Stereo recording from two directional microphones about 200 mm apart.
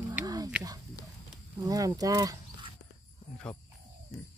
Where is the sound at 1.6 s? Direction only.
15° right (ahead or behind).